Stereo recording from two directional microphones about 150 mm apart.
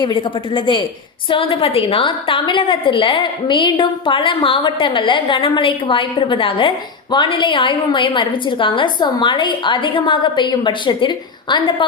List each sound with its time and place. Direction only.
0.0 s a woman's voice: 30° left (ahead or behind)